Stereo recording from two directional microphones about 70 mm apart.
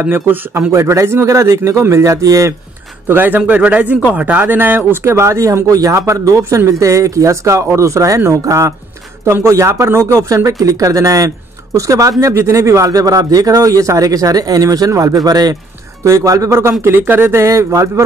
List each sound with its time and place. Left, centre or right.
0.0 s speech: right
0.6 s a man's voice: right
3.1 s a man's voice: right
16.0 s a man's voice: right
16.8 s speech: right
17.5 s a man's voice: right